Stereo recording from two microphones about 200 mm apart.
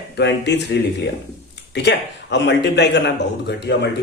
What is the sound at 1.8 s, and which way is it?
Speech, 60° left (ahead or behind).